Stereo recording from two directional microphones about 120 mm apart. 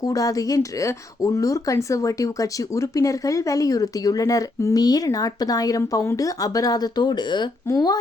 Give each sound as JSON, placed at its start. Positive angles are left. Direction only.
{"t": 0.0, "sound": "speech", "side_deg": 30}